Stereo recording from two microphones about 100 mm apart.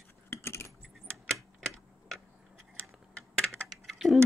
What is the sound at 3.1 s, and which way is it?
Computer keyboard, 10° left (ahead or behind).